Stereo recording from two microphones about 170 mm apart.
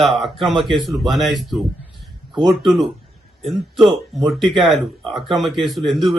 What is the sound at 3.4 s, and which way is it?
Speech, centre (ahead or behind).